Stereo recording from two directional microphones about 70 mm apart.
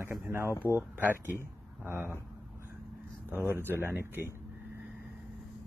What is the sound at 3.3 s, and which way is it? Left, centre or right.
Speech, right.